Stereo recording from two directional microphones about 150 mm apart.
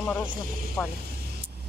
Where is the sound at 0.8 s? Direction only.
10° left (ahead or behind).